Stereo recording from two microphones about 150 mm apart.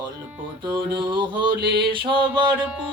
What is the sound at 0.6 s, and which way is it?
Mantra, 30° right (ahead or behind).